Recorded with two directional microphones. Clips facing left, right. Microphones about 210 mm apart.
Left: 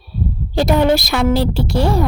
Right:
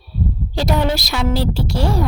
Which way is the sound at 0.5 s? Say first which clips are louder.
Left 6 dB; 55° left (ahead or behind).